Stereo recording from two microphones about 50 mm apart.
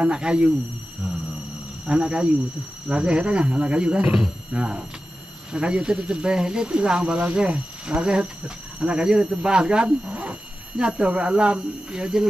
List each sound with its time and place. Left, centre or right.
0.0 s speech: centre
1.9 s speech: right